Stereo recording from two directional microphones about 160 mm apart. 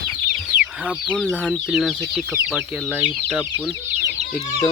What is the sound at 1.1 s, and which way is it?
Speech, 5° left (ahead or behind).